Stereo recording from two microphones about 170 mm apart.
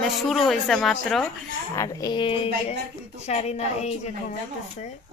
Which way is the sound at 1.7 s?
20° left (ahead or behind).